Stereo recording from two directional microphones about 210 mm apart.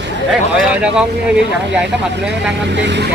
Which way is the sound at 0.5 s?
5° right (ahead or behind).